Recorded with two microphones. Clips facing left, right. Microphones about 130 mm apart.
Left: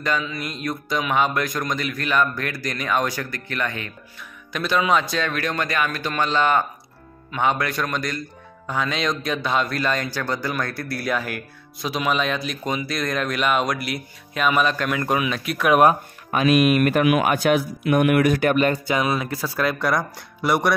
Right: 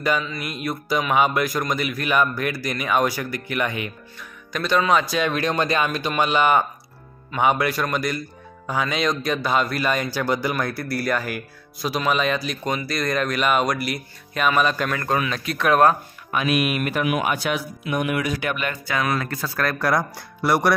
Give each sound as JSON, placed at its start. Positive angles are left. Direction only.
{"t": 0.2, "sound": "a man's voice", "side_deg": 0}
{"t": 4.2, "sound": "speech", "side_deg": 0}
{"t": 5.2, "sound": "a man's voice", "side_deg": -20}
{"t": 14.9, "sound": "speech", "side_deg": 10}
{"t": 16.3, "sound": "speech", "side_deg": 40}
{"t": 18.9, "sound": "speech", "side_deg": 20}
{"t": 19.2, "sound": "speech", "side_deg": 10}
{"t": 19.8, "sound": "a man's voice", "side_deg": -10}